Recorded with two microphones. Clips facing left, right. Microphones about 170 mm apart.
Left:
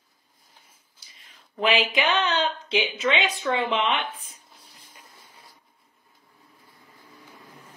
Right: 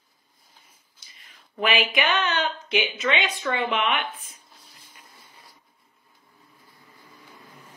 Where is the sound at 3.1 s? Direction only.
30° left (ahead or behind).